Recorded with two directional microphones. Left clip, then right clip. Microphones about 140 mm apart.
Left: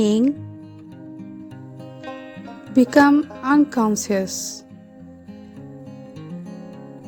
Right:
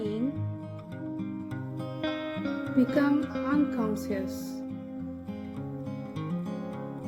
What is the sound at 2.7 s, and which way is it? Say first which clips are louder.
Speech: left 12 dB; 90° left.